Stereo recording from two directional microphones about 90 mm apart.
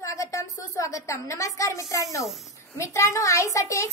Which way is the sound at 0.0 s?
35° left (ahead or behind).